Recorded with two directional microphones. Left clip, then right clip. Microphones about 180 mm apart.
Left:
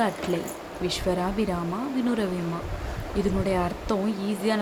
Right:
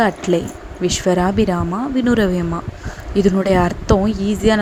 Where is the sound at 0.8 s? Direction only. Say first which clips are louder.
Right 10 dB; 40° right (ahead or behind).